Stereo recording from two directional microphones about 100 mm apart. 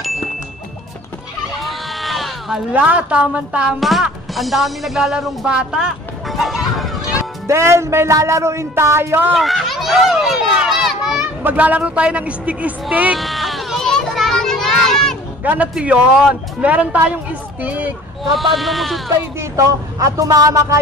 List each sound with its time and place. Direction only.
1.6 s bleat: centre (ahead or behind)
2.7 s speech: 15° right (ahead or behind)
3.8 s speech: centre (ahead or behind)
7.4 s speech: 25° right (ahead or behind)
9.3 s speech: centre (ahead or behind)
11.4 s speech: 15° right (ahead or behind)
13.2 s children playing: centre (ahead or behind)
15.4 s a man's voice: 15° right (ahead or behind)
18.3 s a man's voice: centre (ahead or behind)
19.5 s speech: 35° right (ahead or behind)